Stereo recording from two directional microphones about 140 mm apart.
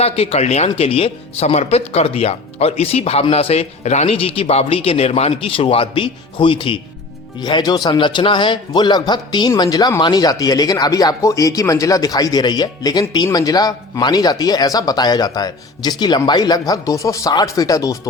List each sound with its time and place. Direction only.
0.0 s a man's voice: 45° left (ahead or behind); by 17.9 s 25° left (ahead or behind)